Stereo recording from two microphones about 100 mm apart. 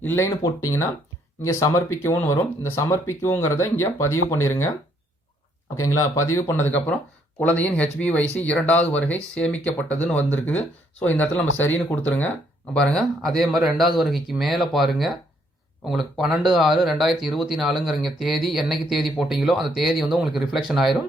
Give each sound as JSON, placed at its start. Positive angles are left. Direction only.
{"t": 0.0, "sound": "speech", "side_deg": 20}
{"t": 5.8, "sound": "speech", "side_deg": 30}
{"t": 12.7, "sound": "speech", "side_deg": 5}